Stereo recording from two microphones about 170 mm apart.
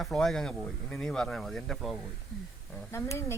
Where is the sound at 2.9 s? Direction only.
15° left (ahead or behind).